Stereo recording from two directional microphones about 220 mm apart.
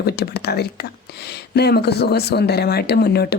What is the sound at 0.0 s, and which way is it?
Speech, 45° left (ahead or behind).